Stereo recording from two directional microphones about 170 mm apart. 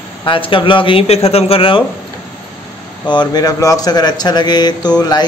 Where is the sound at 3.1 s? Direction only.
25° left (ahead or behind).